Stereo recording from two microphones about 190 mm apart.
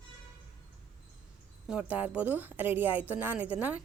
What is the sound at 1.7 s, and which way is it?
A woman's voice, 5° right (ahead or behind).